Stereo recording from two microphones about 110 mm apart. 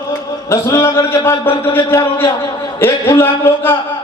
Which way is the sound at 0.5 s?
25° left (ahead or behind).